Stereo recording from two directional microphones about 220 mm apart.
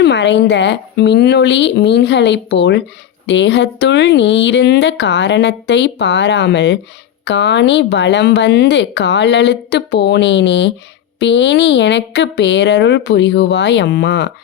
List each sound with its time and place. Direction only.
0.0 s speech: 50° left (ahead or behind)